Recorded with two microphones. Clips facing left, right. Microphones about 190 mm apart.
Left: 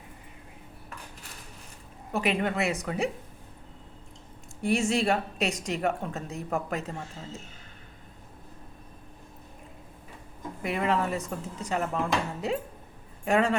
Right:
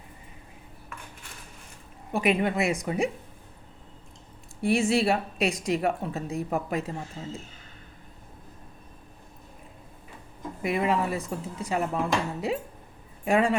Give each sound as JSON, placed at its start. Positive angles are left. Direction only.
{"t": 2.1, "sound": "speech", "side_deg": -10}
{"t": 4.6, "sound": "speech", "side_deg": 40}
{"t": 4.9, "sound": "speech", "side_deg": -10}
{"t": 10.6, "sound": "speech", "side_deg": -10}